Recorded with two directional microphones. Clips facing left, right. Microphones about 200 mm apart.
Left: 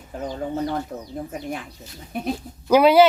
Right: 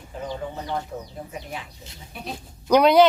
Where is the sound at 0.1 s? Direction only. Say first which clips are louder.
Left 4 dB; 45° left (ahead or behind).